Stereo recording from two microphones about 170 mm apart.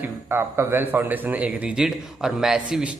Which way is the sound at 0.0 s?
15° right (ahead or behind).